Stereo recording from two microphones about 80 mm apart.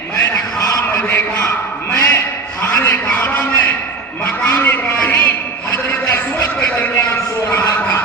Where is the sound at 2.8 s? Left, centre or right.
Left.